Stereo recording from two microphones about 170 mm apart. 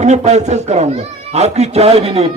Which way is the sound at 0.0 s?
40° right (ahead or behind).